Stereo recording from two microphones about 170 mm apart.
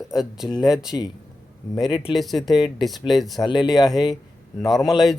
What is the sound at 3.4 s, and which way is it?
Speech, 25° left (ahead or behind).